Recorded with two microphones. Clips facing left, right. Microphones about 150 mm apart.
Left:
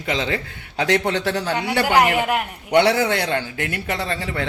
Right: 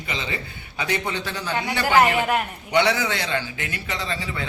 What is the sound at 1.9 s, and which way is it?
Speech, 15° left (ahead or behind).